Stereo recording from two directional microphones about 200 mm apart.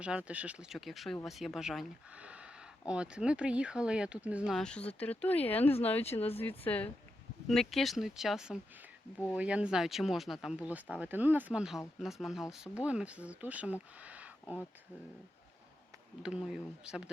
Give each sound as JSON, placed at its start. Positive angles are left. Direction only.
{"t": 0.0, "sound": "speech", "side_deg": -5}
{"t": 6.1, "sound": "speech", "side_deg": 30}
{"t": 6.4, "sound": "speech", "side_deg": 10}
{"t": 14.0, "sound": "a sound", "side_deg": -5}
{"t": 16.2, "sound": "speech", "side_deg": -5}